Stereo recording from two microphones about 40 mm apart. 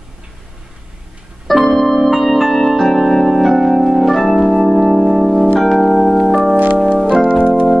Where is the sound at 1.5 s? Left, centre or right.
Centre.